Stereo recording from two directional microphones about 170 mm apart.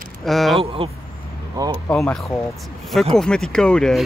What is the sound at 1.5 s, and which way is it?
Speech, 20° right (ahead or behind).